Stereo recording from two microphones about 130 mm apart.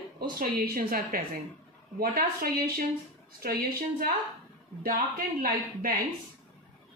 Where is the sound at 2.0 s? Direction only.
90° right.